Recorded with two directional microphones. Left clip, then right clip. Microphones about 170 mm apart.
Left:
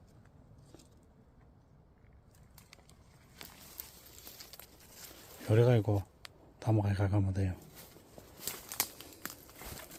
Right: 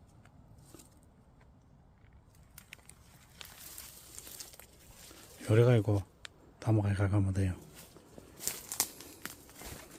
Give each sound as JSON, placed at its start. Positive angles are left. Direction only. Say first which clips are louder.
{"t": 4.4, "sound": "a sound", "louder": "even", "side_deg": -25}
{"t": 5.4, "sound": "a man's voice", "louder": "right 1 dB", "side_deg": -10}
{"t": 8.7, "sound": "crumpling", "louder": "left 1 dB", "side_deg": 0}